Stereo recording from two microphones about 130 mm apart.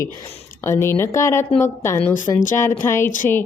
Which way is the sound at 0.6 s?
20° left (ahead or behind).